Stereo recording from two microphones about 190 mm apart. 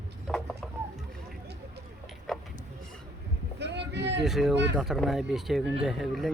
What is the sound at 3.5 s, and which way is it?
Boat, 65° right (ahead or behind).